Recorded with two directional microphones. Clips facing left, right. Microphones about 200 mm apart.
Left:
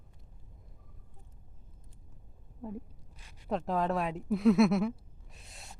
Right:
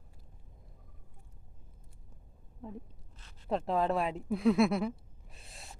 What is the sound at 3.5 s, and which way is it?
A woman's voice, centre (ahead or behind).